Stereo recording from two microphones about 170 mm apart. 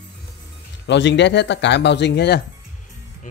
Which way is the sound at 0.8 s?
90° left.